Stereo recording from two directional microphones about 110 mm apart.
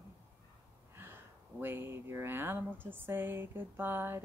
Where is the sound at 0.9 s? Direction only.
20° right (ahead or behind).